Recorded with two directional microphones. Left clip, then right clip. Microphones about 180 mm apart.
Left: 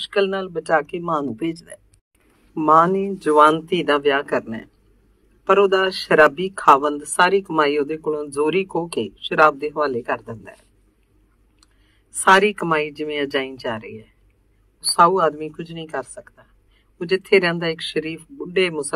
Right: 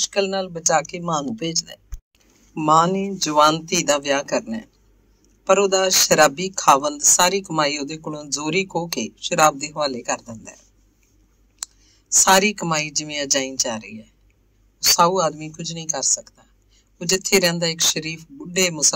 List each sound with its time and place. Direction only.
0.0 s speech: 15° right (ahead or behind)
12.3 s speech: 20° right (ahead or behind)